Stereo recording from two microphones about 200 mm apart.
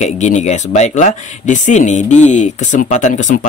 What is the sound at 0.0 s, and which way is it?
Speech, 35° left (ahead or behind).